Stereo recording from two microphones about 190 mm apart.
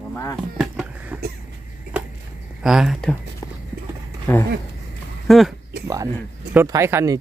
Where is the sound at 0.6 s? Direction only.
5° right (ahead or behind).